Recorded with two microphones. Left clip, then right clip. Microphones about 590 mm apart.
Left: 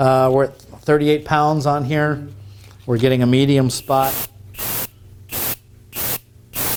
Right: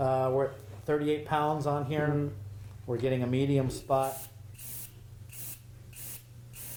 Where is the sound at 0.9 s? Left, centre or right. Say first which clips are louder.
Left 13 dB; left.